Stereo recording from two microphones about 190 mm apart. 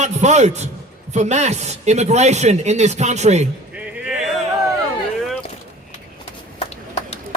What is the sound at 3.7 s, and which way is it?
Music, 10° right (ahead or behind).